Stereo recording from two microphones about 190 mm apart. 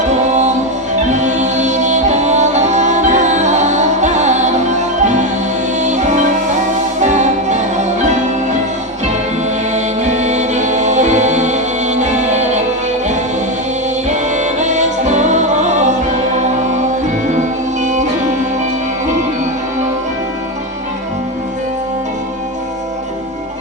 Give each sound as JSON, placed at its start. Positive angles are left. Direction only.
{"t": 0.1, "sound": "music", "side_deg": -40}
{"t": 9.7, "sound": "music", "side_deg": -40}
{"t": 14.1, "sound": "music", "side_deg": -40}
{"t": 17.8, "sound": "music", "side_deg": -40}